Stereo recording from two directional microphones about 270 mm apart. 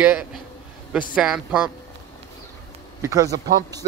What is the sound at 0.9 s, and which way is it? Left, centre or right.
Speech, centre.